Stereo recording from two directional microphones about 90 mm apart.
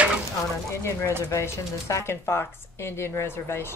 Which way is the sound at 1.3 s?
35° left (ahead or behind).